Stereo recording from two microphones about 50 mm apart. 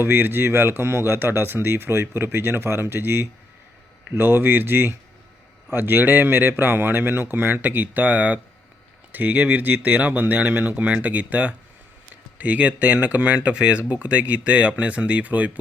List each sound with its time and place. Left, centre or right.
0.0 s speech: right